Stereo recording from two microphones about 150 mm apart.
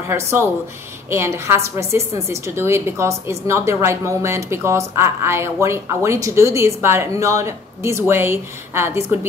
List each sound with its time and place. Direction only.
0.1 s a woman's voice: 15° right (ahead or behind)